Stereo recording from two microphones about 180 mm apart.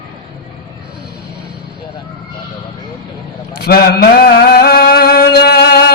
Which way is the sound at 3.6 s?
60° left (ahead or behind).